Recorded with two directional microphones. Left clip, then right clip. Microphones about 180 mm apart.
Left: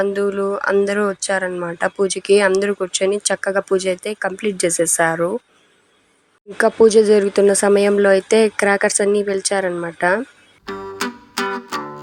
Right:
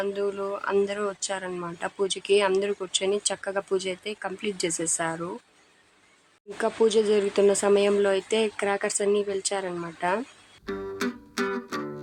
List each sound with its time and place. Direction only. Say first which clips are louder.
0.0 s speech: left 10 dB; 25° left (ahead or behind)
6.6 s speech: left 11 dB; 30° left (ahead or behind)
10.7 s music: left 6 dB; centre (ahead or behind)